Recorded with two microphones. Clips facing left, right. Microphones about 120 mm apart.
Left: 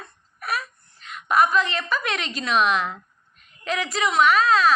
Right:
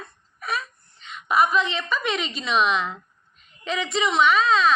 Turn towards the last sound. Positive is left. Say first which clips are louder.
# left 1 dB
turn(degrees=0)  # may be behind; listen again after turning